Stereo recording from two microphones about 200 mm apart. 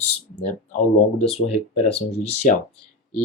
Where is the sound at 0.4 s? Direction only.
40° left (ahead or behind).